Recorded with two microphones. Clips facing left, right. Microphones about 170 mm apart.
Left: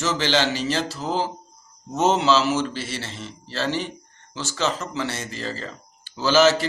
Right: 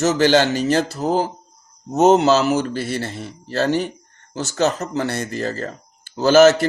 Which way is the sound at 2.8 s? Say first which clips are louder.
Right 7 dB; 55° right (ahead or behind).